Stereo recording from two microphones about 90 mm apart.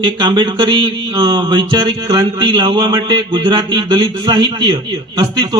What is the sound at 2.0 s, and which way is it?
Speech, 40° right (ahead or behind).